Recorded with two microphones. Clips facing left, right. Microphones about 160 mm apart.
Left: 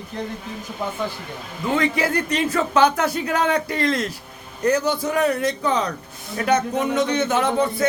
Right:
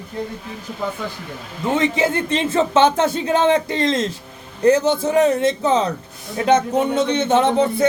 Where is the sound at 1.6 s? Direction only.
25° right (ahead or behind).